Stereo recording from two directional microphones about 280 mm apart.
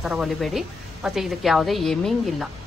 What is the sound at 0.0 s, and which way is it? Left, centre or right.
A woman's voice, centre.